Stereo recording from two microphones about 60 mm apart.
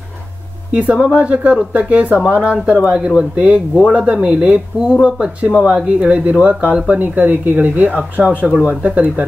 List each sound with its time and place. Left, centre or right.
0.7 s speech: right